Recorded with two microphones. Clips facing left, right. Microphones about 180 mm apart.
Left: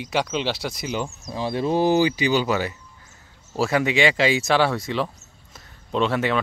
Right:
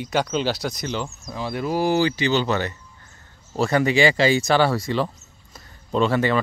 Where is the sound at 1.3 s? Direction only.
25° left (ahead or behind).